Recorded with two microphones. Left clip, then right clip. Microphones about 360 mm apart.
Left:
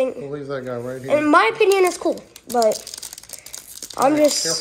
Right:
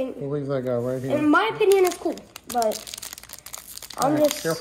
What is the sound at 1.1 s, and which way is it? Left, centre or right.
Speech, left.